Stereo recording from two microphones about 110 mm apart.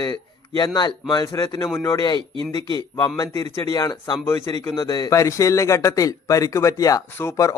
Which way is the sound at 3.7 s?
40° left (ahead or behind).